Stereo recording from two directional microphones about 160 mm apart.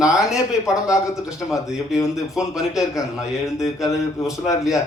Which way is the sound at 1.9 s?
20° left (ahead or behind).